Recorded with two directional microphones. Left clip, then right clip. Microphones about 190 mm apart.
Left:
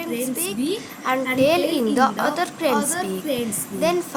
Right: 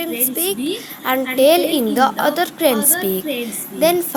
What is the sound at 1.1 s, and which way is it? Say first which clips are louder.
A woman's voice: right 5 dB; 25° right (ahead or behind).